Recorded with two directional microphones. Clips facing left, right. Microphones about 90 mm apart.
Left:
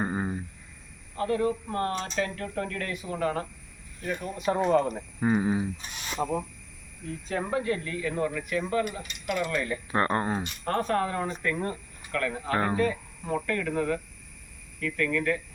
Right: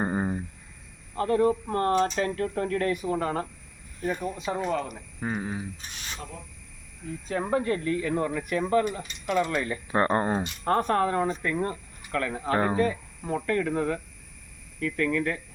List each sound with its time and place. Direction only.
0.0 s a sound: 30° right (ahead or behind)
1.1 s speech: 35° right (ahead or behind)
4.4 s speech: 5° left (ahead or behind)
7.3 s speech: 30° right (ahead or behind)